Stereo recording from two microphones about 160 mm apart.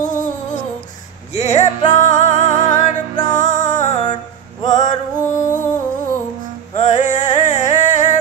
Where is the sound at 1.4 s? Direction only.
45° left (ahead or behind).